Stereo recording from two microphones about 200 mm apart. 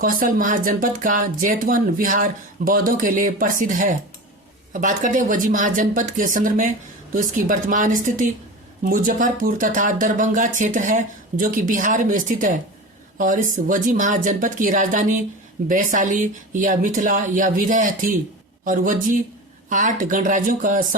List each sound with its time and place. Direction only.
0.0 s speech: 45° right (ahead or behind)